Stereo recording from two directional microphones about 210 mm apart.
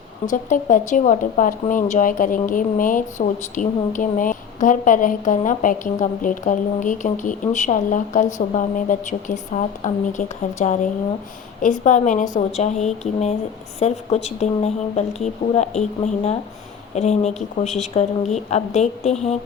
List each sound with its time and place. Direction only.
0.3 s speech: 35° left (ahead or behind)
16.9 s speech: 35° left (ahead or behind)